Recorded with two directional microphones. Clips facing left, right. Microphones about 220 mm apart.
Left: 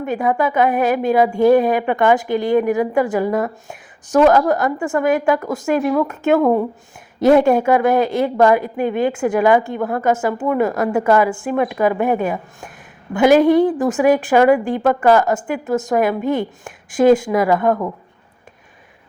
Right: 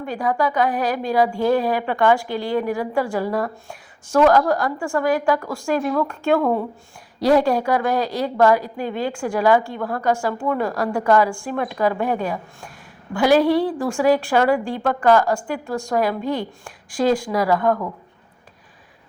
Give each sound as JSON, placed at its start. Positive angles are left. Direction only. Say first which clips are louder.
{"t": 0.0, "sound": "a woman's voice", "louder": "left 3 dB", "side_deg": 20}
{"t": 13.1, "sound": "a woman's voice", "louder": "left 5 dB", "side_deg": 20}